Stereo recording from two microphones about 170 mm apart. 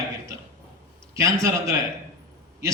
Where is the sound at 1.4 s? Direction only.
20° right (ahead or behind).